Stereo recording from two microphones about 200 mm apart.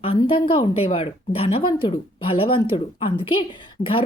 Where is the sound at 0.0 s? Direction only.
25° left (ahead or behind).